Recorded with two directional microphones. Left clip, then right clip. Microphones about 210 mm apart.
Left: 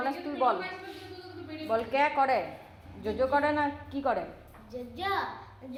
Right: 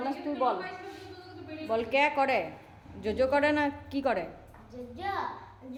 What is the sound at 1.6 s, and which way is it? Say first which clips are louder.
A woman's voice: even; 15° right (ahead or behind).